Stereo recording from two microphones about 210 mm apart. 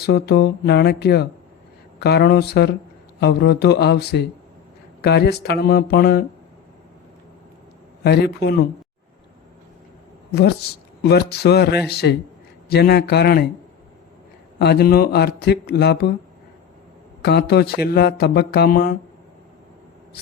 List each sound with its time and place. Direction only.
0.0 s speech: 50° left (ahead or behind)
8.0 s speech: 50° left (ahead or behind)
11.0 s speech: 50° left (ahead or behind)
14.6 s speech: 50° left (ahead or behind)
17.2 s speech: 50° left (ahead or behind)